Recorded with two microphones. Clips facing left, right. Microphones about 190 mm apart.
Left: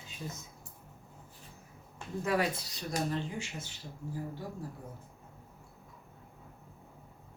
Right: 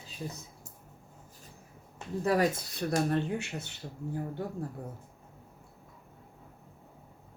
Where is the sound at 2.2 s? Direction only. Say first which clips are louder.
Right 4 dB; 45° right (ahead or behind); by 3.8 s 65° right (ahead or behind).